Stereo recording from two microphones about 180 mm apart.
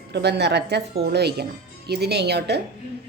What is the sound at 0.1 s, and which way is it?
A woman's voice, 65° right (ahead or behind).